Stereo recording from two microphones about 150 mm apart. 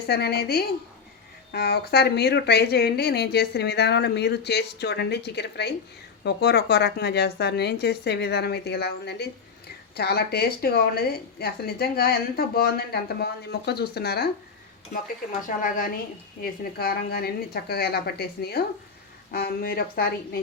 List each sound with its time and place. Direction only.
0.1 s a woman's voice: 90° left
15.4 s a woman's voice: 65° left (ahead or behind)
16.4 s a woman's voice: 90° left